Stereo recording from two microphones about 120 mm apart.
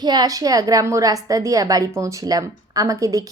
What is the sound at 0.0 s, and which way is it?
A woman's voice, 35° right (ahead or behind).